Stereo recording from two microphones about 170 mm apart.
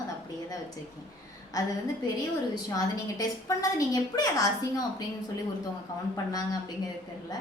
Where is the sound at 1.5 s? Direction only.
20° left (ahead or behind).